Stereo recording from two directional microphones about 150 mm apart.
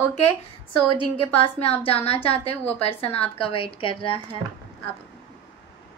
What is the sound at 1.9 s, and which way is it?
A woman's voice, 40° left (ahead or behind).